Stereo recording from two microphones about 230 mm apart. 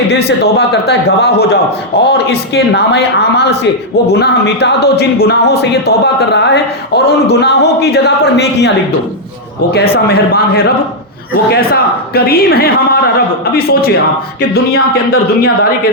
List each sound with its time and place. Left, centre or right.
0.3 s speech: left
9.9 s speech: left